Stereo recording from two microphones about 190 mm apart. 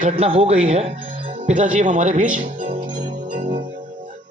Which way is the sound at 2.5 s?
45° right (ahead or behind).